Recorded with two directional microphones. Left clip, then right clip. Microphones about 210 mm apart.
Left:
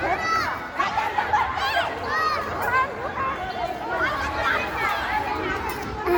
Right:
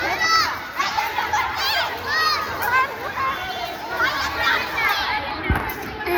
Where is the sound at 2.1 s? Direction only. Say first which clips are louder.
Right 4 dB; 30° left (ahead or behind).